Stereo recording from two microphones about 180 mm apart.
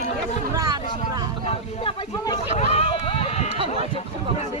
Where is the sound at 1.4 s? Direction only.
30° left (ahead or behind).